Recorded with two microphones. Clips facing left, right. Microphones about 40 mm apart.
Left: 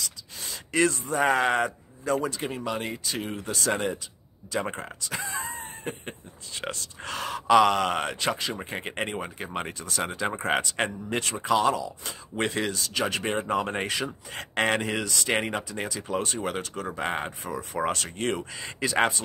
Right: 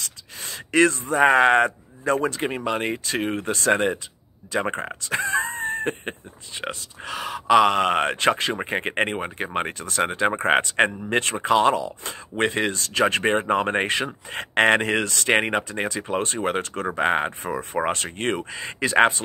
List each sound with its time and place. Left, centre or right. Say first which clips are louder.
0.0 s gasp: right 2 dB; right
1.3 s speech: right 7 dB; right
5.2 s a sound: right 13 dB; right
6.5 s speech: right 3 dB; right
7.0 s speech: right 1 dB; centre; by 8.2 s right
8.2 s speech: right 7 dB; right
12.7 s speech: right 7 dB; right
18.0 s speech: right 3 dB; right